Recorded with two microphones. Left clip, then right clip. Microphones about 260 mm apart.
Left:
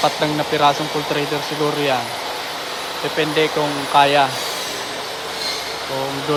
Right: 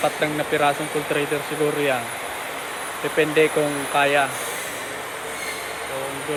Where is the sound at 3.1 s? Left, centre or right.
Centre.